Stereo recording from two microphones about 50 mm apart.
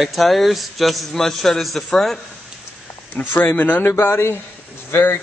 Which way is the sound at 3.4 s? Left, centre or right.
Left.